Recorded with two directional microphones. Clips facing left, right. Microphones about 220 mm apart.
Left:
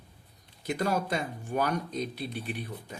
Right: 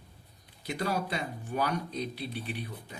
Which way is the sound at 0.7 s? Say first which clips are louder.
Left 3 dB; 45° left (ahead or behind).